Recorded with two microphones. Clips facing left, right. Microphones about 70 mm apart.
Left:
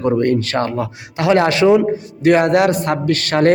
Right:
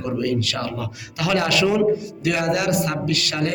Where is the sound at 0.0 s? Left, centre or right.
Left.